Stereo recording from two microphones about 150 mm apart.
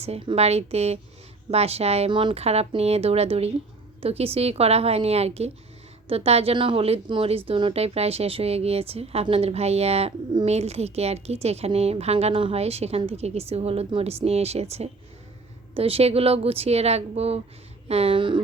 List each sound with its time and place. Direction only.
0.3 s a woman's voice: 45° right (ahead or behind)